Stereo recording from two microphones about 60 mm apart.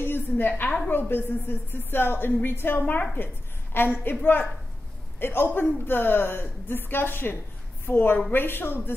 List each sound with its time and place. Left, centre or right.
0.0 s a woman's voice: left
4.2 s a woman's voice: left
5.2 s a woman's voice: left